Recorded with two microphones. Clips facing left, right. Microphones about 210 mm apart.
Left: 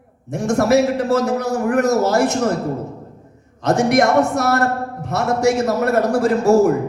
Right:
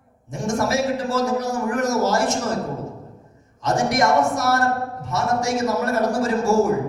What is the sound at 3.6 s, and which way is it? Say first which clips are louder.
Speech: left 5 dB; 65° left (ahead or behind).